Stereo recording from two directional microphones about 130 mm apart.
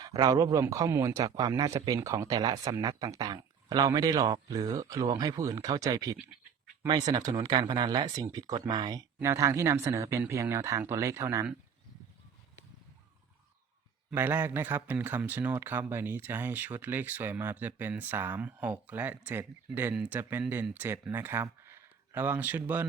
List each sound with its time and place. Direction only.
0.0 s a man's voice: 30° right (ahead or behind)
14.1 s speech: 15° right (ahead or behind)